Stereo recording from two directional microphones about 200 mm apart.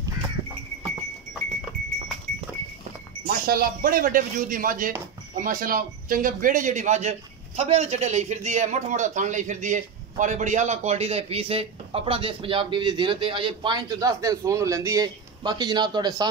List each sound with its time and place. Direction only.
3.3 s a man's voice: 50° right (ahead or behind); by 16.3 s 20° right (ahead or behind)